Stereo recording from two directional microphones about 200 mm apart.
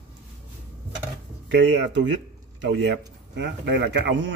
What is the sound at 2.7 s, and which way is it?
Speech, 60° right (ahead or behind).